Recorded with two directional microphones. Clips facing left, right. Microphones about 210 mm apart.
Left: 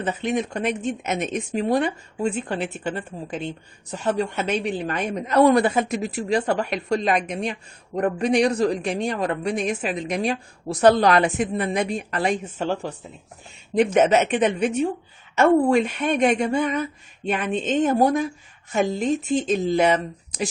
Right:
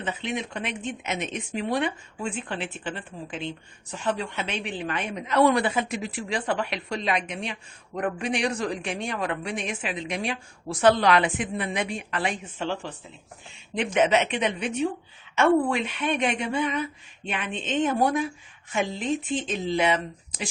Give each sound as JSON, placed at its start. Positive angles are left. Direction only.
{"t": 0.0, "sound": "a woman's voice", "side_deg": 45}